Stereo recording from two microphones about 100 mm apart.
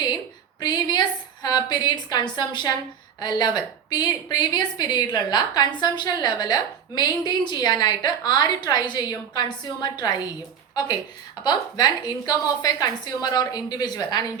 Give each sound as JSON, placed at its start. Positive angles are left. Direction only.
{"t": 0.6, "sound": "a woman's voice", "side_deg": 45}
{"t": 11.4, "sound": "a woman's voice", "side_deg": 45}